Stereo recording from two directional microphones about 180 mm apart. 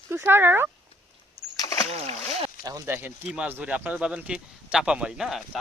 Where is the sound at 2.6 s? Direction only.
15° right (ahead or behind).